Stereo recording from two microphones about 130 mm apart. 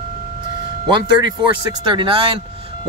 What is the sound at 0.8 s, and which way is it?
A man's voice, 35° right (ahead or behind).